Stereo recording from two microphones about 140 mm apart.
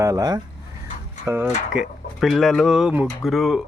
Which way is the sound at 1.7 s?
Centre (ahead or behind).